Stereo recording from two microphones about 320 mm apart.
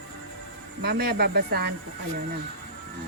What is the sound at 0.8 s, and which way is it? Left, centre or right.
Speech, right.